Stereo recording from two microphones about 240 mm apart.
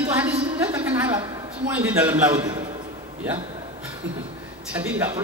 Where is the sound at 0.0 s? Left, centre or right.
Centre.